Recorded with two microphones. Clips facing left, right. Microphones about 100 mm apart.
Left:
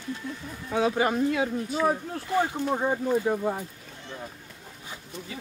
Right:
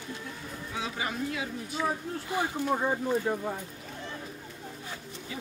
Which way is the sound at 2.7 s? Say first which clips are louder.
Left 2 dB; 15° left (ahead or behind).